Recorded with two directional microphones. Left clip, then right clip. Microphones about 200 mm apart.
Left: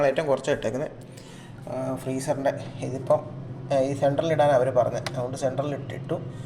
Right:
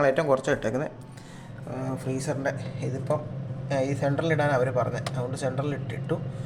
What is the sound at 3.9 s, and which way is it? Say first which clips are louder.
Speech: left 3 dB; 20° right (ahead or behind).